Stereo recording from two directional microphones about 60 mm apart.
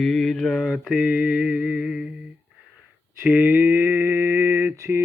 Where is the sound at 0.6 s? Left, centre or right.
Centre.